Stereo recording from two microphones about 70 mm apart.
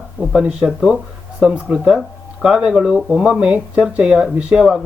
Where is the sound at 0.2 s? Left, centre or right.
Centre.